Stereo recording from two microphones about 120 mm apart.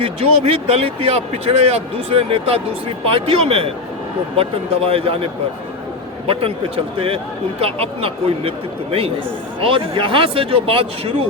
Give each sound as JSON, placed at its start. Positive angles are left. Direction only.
{"t": 0.0, "sound": "speech", "side_deg": -60}
{"t": 4.9, "sound": "speech", "side_deg": -55}